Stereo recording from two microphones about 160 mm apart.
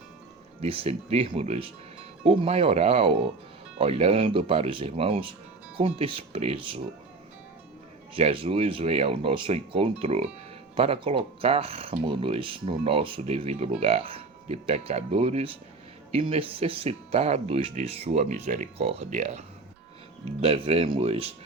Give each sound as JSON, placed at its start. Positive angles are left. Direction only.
{"t": 0.6, "sound": "speech", "side_deg": -35}
{"t": 8.1, "sound": "speech", "side_deg": -35}